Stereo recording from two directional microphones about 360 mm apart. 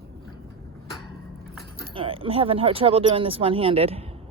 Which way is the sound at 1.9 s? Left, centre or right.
Centre.